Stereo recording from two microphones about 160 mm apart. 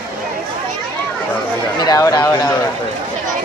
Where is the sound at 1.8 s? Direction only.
20° left (ahead or behind).